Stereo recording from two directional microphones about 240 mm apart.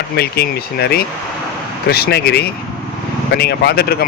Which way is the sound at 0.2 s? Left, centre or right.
Left.